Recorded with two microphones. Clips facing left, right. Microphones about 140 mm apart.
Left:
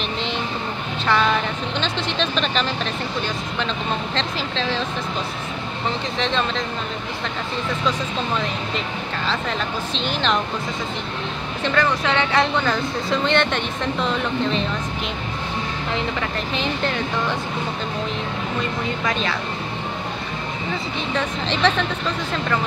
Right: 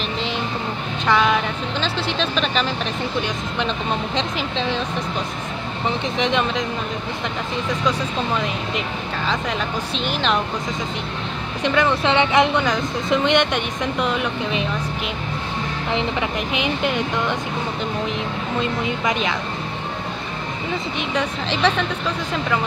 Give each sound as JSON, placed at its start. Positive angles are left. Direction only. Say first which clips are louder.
{"t": 1.0, "sound": "speech", "louder": "right 1 dB", "side_deg": -10}
{"t": 4.1, "sound": "speech", "louder": "right 2 dB", "side_deg": -15}
{"t": 6.1, "sound": "speech", "louder": "right 3 dB", "side_deg": -15}
{"t": 9.3, "sound": "speech", "louder": "right 1 dB", "side_deg": -10}
{"t": 11.6, "sound": "speech", "louder": "right 2 dB", "side_deg": -20}
{"t": 15.9, "sound": "speech", "louder": "right 3 dB", "side_deg": -15}
{"t": 18.6, "sound": "speech", "louder": "right 3 dB", "side_deg": -20}
{"t": 21.1, "sound": "speech", "louder": "even", "side_deg": -10}